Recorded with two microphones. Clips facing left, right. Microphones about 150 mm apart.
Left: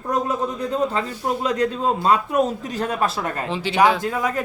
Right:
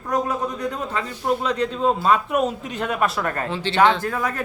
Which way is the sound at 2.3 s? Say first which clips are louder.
Left 1 dB; 40° left (ahead or behind).